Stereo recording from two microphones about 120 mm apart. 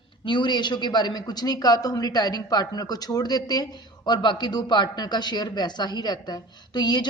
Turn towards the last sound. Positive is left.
turn(degrees=35)  # may be behind; listen again after turning